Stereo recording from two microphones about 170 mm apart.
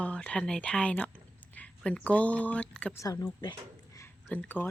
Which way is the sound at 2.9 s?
20° left (ahead or behind).